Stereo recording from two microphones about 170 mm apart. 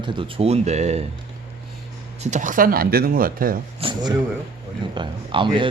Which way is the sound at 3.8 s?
25° right (ahead or behind).